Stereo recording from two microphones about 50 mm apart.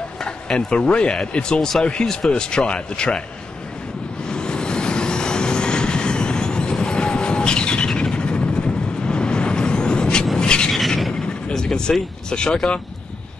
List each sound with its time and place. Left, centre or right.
0.2 s speech: centre
4.3 s vehicle: centre
10.3 s a sound: centre
10.7 s vehicle: centre
11.4 s speech: centre